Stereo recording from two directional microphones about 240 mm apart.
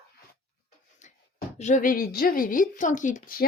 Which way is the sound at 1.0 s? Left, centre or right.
Left.